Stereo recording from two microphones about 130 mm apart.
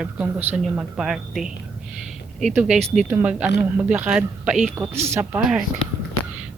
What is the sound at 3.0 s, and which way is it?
Speech, 10° right (ahead or behind).